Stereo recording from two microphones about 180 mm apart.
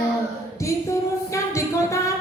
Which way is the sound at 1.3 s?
15° left (ahead or behind).